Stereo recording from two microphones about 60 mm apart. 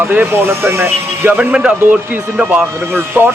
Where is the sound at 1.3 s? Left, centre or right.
Centre.